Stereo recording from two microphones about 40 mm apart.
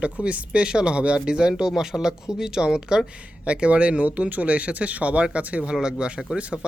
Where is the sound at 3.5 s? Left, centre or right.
Right.